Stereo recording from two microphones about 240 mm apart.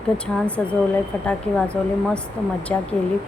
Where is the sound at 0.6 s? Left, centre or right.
Centre.